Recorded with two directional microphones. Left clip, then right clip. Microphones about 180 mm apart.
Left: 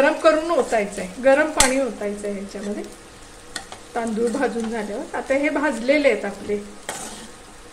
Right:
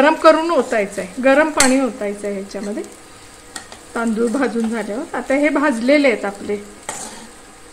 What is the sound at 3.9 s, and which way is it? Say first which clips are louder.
Speech: right 4 dB; 40° right (ahead or behind).